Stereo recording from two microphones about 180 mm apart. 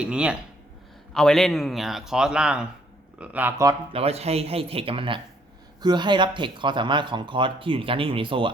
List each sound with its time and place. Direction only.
0.0 s speech: 5° right (ahead or behind)
3.9 s speech: 35° right (ahead or behind)